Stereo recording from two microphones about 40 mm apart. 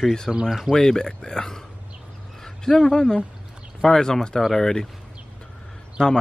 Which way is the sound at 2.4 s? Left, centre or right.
Centre.